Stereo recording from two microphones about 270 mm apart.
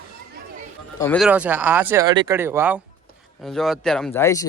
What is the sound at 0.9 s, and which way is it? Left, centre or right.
A man's voice, centre.